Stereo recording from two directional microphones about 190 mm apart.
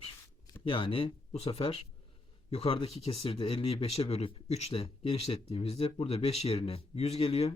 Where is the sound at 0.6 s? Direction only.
25° left (ahead or behind).